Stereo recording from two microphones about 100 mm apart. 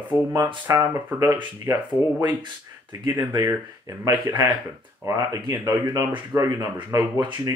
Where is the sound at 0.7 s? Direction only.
30° right (ahead or behind).